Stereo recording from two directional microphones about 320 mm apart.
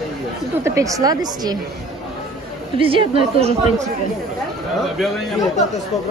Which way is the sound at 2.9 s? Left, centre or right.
Centre.